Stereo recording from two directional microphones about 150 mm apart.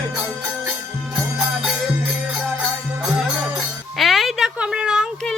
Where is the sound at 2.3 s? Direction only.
5° right (ahead or behind).